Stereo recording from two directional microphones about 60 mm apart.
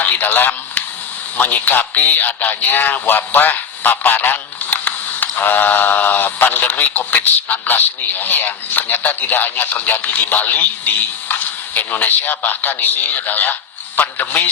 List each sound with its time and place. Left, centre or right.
0.0 s radio: left
1.4 s speech: left